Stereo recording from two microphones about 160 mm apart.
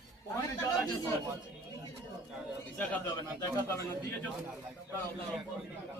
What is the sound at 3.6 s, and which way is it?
Speech, 15° left (ahead or behind).